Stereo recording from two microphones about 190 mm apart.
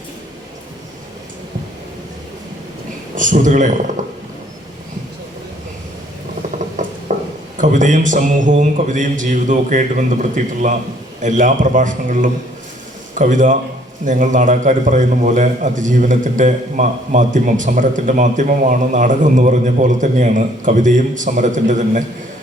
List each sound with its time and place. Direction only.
3.2 s a man's voice: 40° right (ahead or behind)
6.8 s mechanisms: 40° right (ahead or behind)
7.6 s a man's voice: 40° right (ahead or behind)